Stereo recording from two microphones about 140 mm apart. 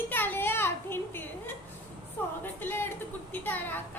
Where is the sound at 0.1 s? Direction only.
15° left (ahead or behind).